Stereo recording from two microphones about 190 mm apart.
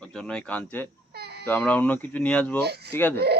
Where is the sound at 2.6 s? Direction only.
60° right (ahead or behind).